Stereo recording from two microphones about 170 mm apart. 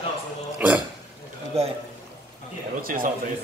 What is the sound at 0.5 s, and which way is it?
Speech, 10° right (ahead or behind).